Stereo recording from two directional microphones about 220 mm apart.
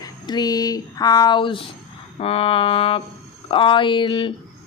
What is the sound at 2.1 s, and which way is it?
Mantra, 25° left (ahead or behind).